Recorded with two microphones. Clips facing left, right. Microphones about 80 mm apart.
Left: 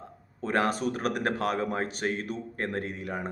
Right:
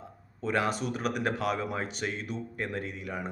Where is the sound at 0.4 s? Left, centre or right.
Left.